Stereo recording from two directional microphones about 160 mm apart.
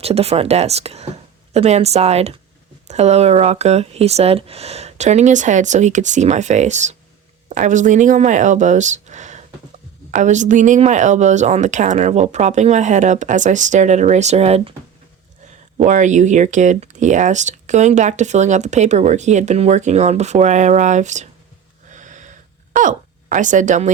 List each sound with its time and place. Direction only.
0.0 s speech: 40° right (ahead or behind)
15.8 s speech: 50° right (ahead or behind)
21.9 s a sound: 50° right (ahead or behind)
22.7 s speech: 55° right (ahead or behind)